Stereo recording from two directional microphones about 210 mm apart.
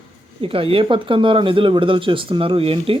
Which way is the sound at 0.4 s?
25° right (ahead or behind).